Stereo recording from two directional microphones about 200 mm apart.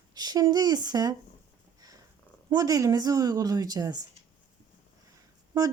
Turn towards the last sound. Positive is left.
turn(degrees=-20)  # may be behind; listen again after turning